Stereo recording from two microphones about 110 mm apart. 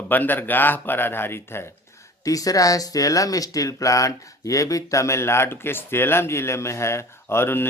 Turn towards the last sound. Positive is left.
turn(degrees=20)  # may be behind; listen again after turning